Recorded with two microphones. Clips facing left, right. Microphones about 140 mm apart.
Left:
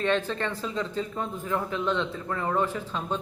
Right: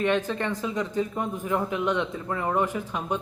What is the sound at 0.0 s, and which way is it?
A man's voice, 15° right (ahead or behind).